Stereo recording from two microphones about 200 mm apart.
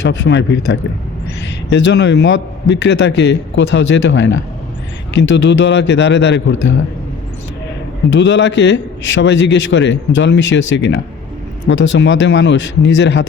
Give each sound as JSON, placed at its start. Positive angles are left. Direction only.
{"t": 0.0, "sound": "a man's voice", "side_deg": 60}
{"t": 8.1, "sound": "a man's voice", "side_deg": 60}